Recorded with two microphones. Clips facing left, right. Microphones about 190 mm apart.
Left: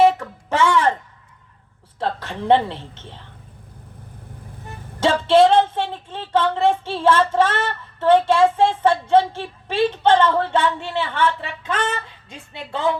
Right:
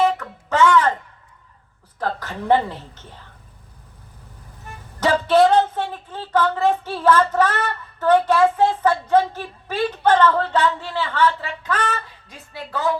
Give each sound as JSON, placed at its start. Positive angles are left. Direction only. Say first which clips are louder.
{"t": 0.2, "sound": "speech", "louder": "right 2 dB", "side_deg": 25}
{"t": 2.0, "sound": "speech", "louder": "left 1 dB", "side_deg": 25}
{"t": 4.9, "sound": "speech", "louder": "left 1 dB", "side_deg": 25}